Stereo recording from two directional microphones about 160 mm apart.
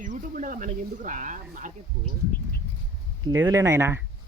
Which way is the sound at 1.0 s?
55° right (ahead or behind).